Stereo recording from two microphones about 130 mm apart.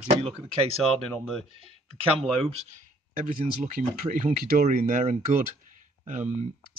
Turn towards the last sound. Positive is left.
turn(degrees=-70)  # may be behind; listen again after turning